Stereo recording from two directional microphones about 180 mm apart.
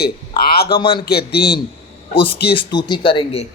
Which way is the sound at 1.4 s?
25° left (ahead or behind).